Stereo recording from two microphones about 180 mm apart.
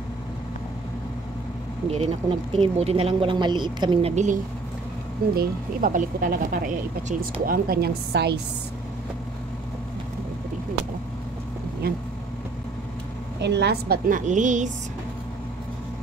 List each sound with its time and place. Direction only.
1.9 s speech: 35° right (ahead or behind)
4.1 s speech: 40° right (ahead or behind)
5.3 s speech: 55° right (ahead or behind)
11.8 s speech: 55° right (ahead or behind)
13.4 s a woman's voice: 70° right (ahead or behind)
14.0 s speech: 45° right (ahead or behind)